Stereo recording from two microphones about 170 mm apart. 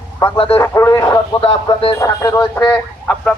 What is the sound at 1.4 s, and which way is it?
Speech, 35° left (ahead or behind).